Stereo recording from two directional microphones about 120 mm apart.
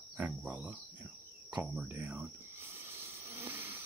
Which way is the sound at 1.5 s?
10° right (ahead or behind).